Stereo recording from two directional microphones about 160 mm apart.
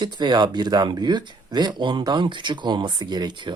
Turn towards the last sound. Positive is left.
turn(degrees=-30)  # may be behind; listen again after turning